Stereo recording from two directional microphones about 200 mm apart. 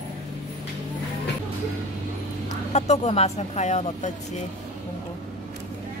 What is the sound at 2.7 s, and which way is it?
Speech, 35° left (ahead or behind).